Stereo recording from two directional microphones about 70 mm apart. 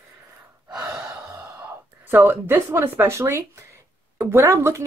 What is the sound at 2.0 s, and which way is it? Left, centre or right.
Speech, right.